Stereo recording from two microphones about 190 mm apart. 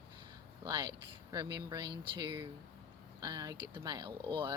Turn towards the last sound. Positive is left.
turn(degrees=-25)  # may be behind; listen again after turning